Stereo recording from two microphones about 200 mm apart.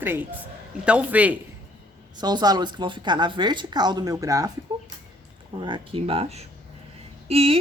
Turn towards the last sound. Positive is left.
turn(degrees=-30)  # may be behind; listen again after turning